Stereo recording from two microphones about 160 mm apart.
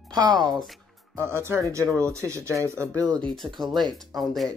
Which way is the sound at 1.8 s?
5° left (ahead or behind).